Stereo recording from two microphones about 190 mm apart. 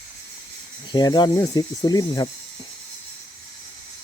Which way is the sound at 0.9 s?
20° left (ahead or behind).